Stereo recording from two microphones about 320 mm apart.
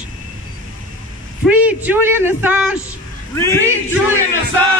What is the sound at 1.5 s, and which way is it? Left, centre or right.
A man's voice, centre.